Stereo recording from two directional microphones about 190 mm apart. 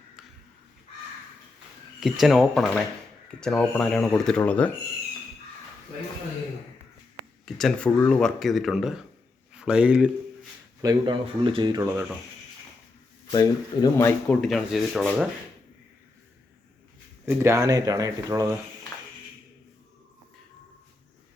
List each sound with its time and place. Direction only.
2.0 s speech: centre (ahead or behind)
7.4 s speech: 5° left (ahead or behind)
10.8 s speech: 20° right (ahead or behind)
13.3 s speech: 20° left (ahead or behind)
14.4 s speech: centre (ahead or behind)
17.2 s speech: 15° right (ahead or behind)